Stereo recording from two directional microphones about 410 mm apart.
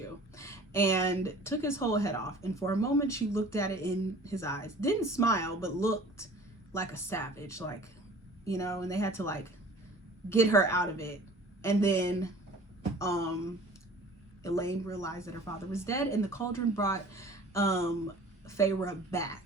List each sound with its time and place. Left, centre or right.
0.3 s speech: centre
14.4 s speech: centre